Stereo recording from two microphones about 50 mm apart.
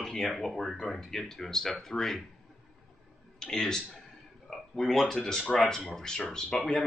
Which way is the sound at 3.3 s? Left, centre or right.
Centre.